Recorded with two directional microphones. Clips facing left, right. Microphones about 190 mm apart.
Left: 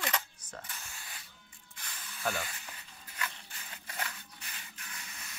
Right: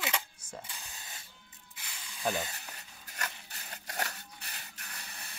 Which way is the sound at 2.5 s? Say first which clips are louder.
Right 1 dB; 40° right (ahead or behind).